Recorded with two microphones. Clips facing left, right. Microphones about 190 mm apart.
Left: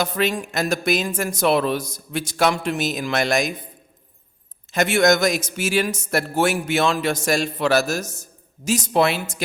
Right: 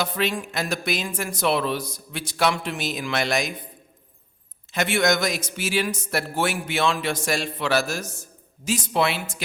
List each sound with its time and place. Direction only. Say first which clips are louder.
0.0 s a man's voice: left 3 dB; 45° left (ahead or behind)
4.7 s a man's voice: left 5 dB; 45° left (ahead or behind)